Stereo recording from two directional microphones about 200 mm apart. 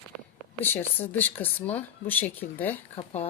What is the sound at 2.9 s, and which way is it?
Speech, 30° left (ahead or behind).